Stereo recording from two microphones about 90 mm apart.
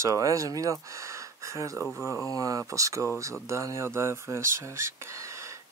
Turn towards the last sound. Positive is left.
turn(degrees=-30)  # may be behind; listen again after turning